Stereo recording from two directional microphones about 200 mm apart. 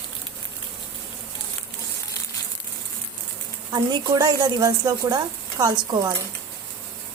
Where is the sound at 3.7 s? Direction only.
20° right (ahead or behind).